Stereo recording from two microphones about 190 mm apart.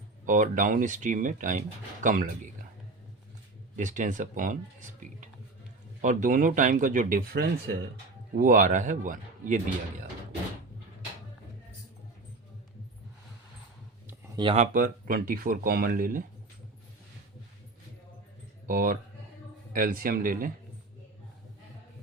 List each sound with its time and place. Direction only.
0.3 s speech: 45° right (ahead or behind)
3.8 s speech: 40° right (ahead or behind)
6.0 s speech: 40° right (ahead or behind)
14.1 s a sound: 15° right (ahead or behind)
14.4 s speech: 35° right (ahead or behind)
18.7 s speech: 45° right (ahead or behind)